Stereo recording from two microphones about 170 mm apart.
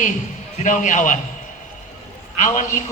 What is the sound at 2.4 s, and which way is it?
Speech, 45° left (ahead or behind).